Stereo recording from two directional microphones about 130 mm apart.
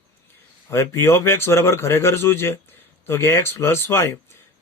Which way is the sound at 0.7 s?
20° left (ahead or behind).